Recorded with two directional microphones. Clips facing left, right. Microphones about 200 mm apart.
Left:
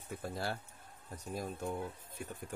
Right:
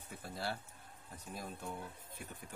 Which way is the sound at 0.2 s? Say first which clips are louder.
Left 2 dB; 45° left (ahead or behind).